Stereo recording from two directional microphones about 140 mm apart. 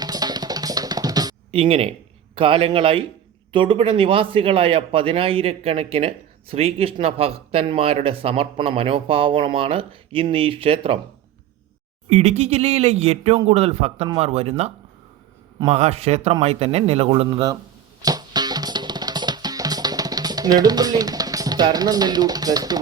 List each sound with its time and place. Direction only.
0.0 s music: 30° right (ahead or behind)
1.5 s a man's voice: 45° right (ahead or behind)
12.0 s speech: 50° right (ahead or behind)
15.7 s speech: 50° right (ahead or behind)
18.0 s music: 30° right (ahead or behind)